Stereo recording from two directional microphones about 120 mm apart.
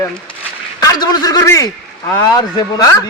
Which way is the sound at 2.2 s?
35° left (ahead or behind).